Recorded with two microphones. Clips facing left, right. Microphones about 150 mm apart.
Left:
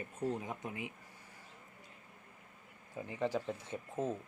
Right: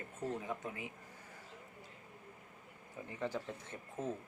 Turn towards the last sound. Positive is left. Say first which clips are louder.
# left 4 dB
turn(degrees=20)  # may be behind; listen again after turning